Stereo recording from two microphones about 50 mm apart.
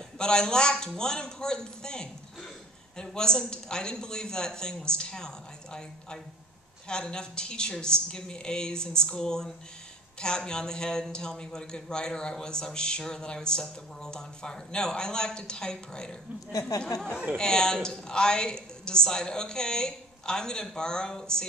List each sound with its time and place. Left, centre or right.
0.2 s a man's voice: centre